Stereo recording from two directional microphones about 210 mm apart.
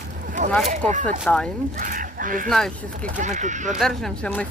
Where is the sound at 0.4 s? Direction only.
35° right (ahead or behind).